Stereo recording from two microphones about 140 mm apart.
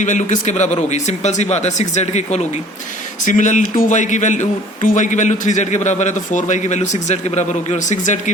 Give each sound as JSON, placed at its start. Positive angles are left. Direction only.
{"t": 0.0, "sound": "a man's voice", "side_deg": 60}
{"t": 3.2, "sound": "a man's voice", "side_deg": 65}